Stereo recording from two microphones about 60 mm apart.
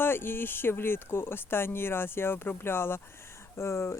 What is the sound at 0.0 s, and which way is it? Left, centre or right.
Speech, left.